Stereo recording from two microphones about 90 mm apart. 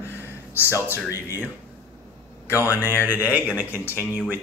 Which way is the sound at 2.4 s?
30° left (ahead or behind).